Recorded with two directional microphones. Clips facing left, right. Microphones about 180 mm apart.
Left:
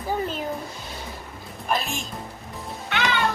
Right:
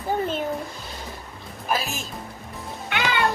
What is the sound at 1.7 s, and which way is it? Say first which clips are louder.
Speech: even; 5° right (ahead or behind).